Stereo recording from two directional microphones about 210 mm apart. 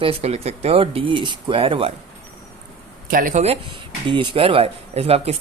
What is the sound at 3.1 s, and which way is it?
A man's voice, 40° right (ahead or behind).